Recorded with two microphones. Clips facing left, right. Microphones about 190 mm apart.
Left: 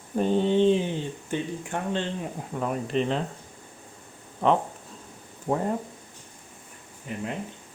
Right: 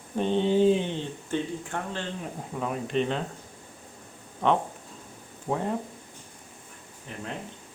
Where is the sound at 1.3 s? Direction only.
15° left (ahead or behind).